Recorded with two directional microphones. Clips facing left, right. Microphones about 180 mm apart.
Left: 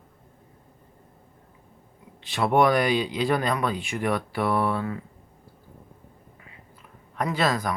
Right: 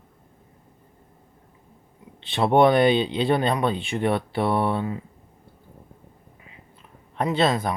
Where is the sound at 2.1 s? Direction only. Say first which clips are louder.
Right 3 dB; 25° right (ahead or behind).